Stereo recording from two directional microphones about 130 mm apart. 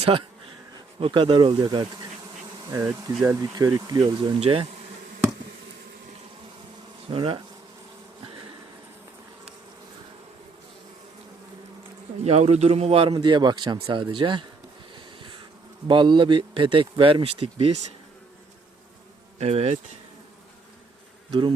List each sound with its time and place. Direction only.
0.0 s speech: 45° right (ahead or behind)
2.6 s bee: 25° right (ahead or behind)
3.2 s speech: 20° right (ahead or behind)
4.2 s a man's voice: 40° right (ahead or behind)
7.1 s a man's voice: 40° right (ahead or behind)
12.2 s a man's voice: 55° right (ahead or behind); by 14.4 s 40° right (ahead or behind)
14.9 s a sound: 40° right (ahead or behind)
15.9 s speech: 40° right (ahead or behind)
19.4 s insect: 60° right (ahead or behind)